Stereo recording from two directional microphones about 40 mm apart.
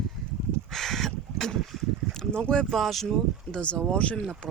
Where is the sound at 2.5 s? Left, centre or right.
Centre.